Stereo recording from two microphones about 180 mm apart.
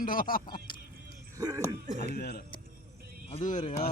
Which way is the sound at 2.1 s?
60° left (ahead or behind).